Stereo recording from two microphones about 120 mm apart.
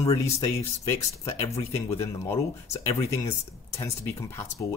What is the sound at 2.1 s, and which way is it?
A man's voice, 25° left (ahead or behind).